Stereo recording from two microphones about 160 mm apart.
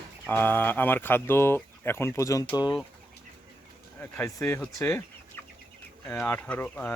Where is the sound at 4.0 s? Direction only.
15° left (ahead or behind).